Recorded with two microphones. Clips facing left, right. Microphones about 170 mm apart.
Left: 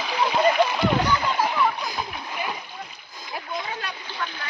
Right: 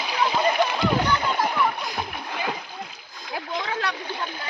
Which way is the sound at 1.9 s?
65° right (ahead or behind).